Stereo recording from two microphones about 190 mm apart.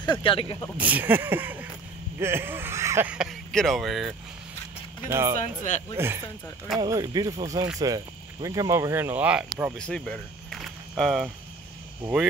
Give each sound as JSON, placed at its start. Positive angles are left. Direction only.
{"t": 0.0, "sound": "speech", "side_deg": 25}
{"t": 0.7, "sound": "speech", "side_deg": -10}
{"t": 5.4, "sound": "speech", "side_deg": 40}
{"t": 5.9, "sound": "speech", "side_deg": -15}
{"t": 9.8, "sound": "speech", "side_deg": 5}